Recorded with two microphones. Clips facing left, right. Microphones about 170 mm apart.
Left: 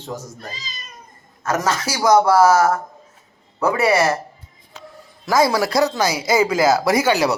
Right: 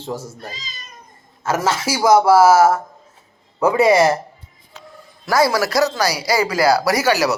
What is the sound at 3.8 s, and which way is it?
Speech, 30° right (ahead or behind).